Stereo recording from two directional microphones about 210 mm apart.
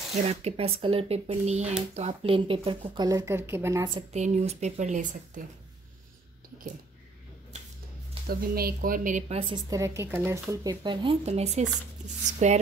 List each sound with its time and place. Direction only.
0.3 s speech: 30° right (ahead or behind)
4.1 s speech: 30° right (ahead or behind)
8.3 s speech: 45° right (ahead or behind)
9.4 s speech: 20° right (ahead or behind)